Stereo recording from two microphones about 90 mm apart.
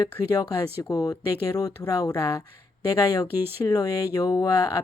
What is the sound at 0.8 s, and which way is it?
Speech, 45° left (ahead or behind).